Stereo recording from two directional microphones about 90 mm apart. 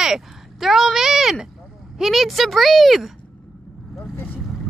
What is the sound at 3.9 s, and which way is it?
Vehicle, 25° left (ahead or behind).